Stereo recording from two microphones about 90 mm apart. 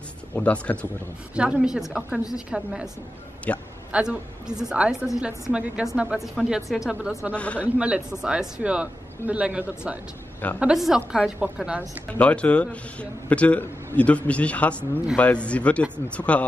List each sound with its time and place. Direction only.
0.3 s a man's voice: 15° left (ahead or behind)
1.3 s a woman's voice: 10° right (ahead or behind)
3.5 s a man's voice: 15° left (ahead or behind)
3.9 s a woman's voice: 10° right (ahead or behind)
7.3 s a man's voice: 15° left (ahead or behind)
7.8 s a woman's voice: 10° right (ahead or behind)
12.2 s a man's voice: 15° left (ahead or behind)